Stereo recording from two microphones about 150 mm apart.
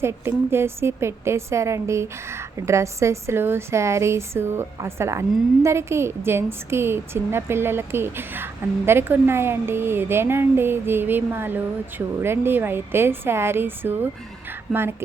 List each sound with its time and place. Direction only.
0.0 s a woman's voice: 15° right (ahead or behind)